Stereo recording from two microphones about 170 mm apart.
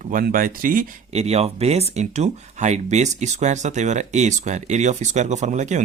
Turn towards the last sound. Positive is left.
turn(degrees=-45)  # may be behind; listen again after turning